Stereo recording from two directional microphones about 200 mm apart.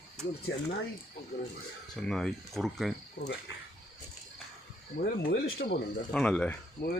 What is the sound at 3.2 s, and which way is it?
Speech, 45° left (ahead or behind).